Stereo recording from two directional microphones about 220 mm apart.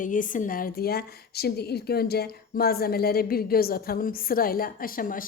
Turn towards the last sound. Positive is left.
turn(degrees=40)  # may be behind; listen again after turning